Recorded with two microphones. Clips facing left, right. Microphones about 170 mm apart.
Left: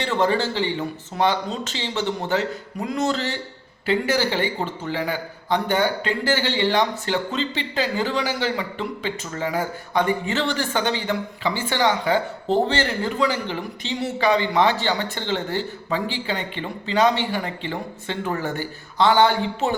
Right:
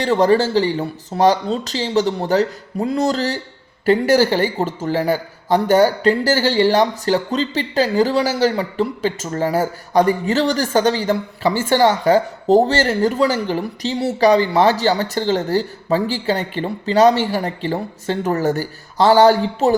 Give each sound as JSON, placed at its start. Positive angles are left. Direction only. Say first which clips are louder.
{"t": 0.0, "sound": "a man's voice", "louder": "right 7 dB", "side_deg": -40}